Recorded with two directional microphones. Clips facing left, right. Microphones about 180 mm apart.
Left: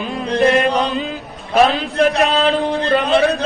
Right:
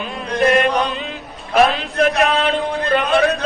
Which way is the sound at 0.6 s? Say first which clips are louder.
Left 1 dB; 35° left (ahead or behind).